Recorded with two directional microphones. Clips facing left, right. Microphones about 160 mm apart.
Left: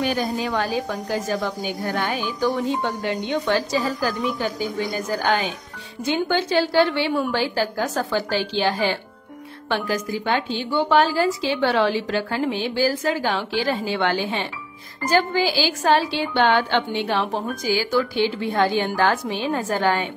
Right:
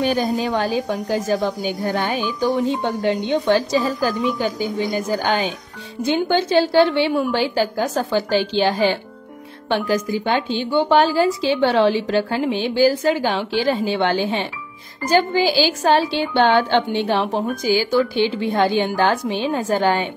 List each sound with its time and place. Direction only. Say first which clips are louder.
0.0 s a woman's voice: right 4 dB; 30° right (ahead or behind)
17.6 s a woman's voice: right 3 dB; 20° right (ahead or behind)